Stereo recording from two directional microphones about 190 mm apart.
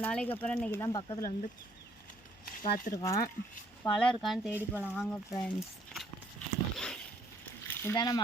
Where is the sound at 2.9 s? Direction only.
20° left (ahead or behind).